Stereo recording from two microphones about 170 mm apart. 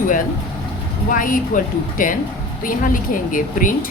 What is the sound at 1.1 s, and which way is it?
A woman's voice, 55° left (ahead or behind).